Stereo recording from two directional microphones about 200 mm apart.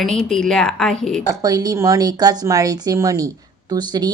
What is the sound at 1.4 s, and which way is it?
Speech, 15° right (ahead or behind).